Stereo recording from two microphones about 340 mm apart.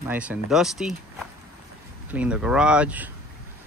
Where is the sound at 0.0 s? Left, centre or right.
Centre.